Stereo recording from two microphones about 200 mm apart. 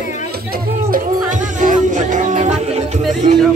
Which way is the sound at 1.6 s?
40° right (ahead or behind).